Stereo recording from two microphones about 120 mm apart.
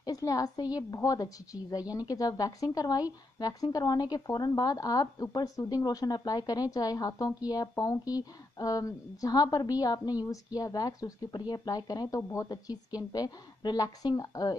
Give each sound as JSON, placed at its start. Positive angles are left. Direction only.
{"t": 0.0, "sound": "a woman's voice", "side_deg": 30}